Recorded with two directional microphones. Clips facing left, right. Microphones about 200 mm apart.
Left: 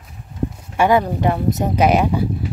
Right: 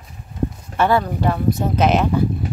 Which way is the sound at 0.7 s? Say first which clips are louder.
Left 3 dB; 15° left (ahead or behind).